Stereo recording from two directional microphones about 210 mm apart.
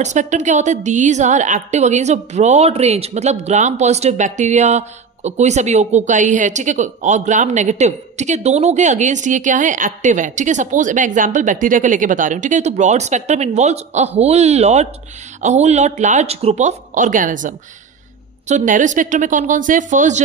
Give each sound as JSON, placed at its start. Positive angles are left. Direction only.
{"t": 0.0, "sound": "a woman's voice", "side_deg": -35}